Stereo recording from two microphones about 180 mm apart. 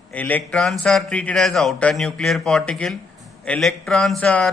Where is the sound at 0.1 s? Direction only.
10° left (ahead or behind).